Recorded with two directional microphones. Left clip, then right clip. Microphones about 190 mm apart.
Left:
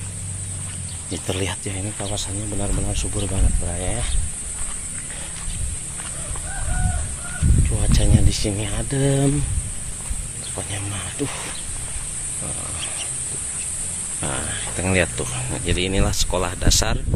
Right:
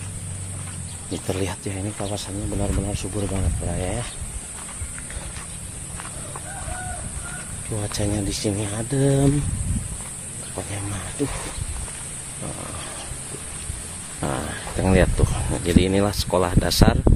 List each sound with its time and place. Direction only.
1.2 s speech: centre (ahead or behind)
7.7 s speech: 10° right (ahead or behind)
10.5 s speech: 10° right (ahead or behind)
14.2 s speech: 25° right (ahead or behind)